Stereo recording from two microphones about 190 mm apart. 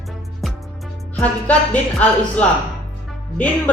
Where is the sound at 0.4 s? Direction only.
Centre (ahead or behind).